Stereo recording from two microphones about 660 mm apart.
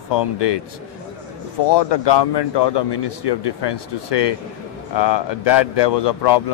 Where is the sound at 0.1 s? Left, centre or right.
Left.